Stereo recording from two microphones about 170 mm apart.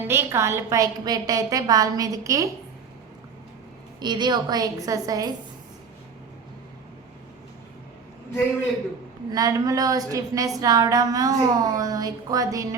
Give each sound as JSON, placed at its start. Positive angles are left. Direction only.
{"t": 0.0, "sound": "a woman's voice", "side_deg": -15}
{"t": 4.0, "sound": "a woman's voice", "side_deg": -25}
{"t": 9.3, "sound": "a woman's voice", "side_deg": -20}